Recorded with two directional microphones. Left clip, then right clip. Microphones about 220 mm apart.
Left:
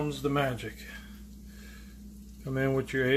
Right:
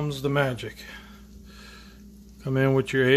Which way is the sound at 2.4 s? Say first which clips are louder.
Right 6 dB; 40° right (ahead or behind).